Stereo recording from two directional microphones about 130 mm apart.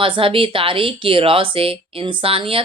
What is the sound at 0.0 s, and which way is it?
Speech, 45° right (ahead or behind).